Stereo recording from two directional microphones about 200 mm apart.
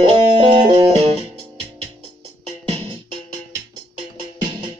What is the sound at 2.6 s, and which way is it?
Music, 25° right (ahead or behind).